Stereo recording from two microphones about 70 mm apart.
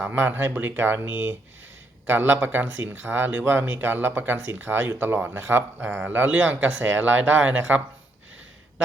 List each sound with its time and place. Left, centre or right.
0.0 s speech: right